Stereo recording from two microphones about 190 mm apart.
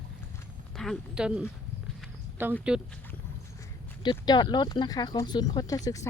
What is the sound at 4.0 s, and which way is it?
Speech, 25° left (ahead or behind).